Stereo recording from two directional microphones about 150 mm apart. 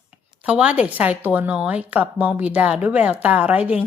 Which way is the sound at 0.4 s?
10° right (ahead or behind).